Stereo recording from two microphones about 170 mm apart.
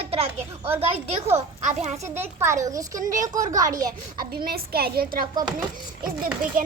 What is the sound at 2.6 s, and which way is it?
Speech, 20° right (ahead or behind).